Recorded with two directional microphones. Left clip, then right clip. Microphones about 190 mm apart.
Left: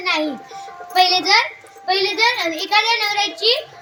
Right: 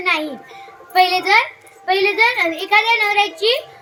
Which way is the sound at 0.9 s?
20° right (ahead or behind).